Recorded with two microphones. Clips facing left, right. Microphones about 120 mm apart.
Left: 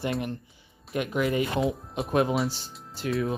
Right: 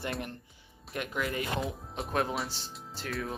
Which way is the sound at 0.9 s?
15° left (ahead or behind).